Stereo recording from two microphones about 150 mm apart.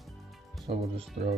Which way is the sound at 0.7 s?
40° right (ahead or behind).